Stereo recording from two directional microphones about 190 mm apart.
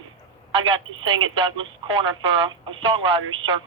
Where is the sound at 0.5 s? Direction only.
25° right (ahead or behind).